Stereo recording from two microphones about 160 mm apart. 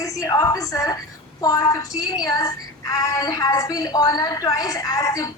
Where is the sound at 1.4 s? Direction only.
25° left (ahead or behind).